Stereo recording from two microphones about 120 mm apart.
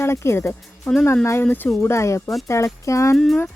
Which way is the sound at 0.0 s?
25° left (ahead or behind).